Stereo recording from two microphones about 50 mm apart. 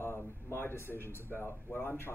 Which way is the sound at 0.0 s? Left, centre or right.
Left.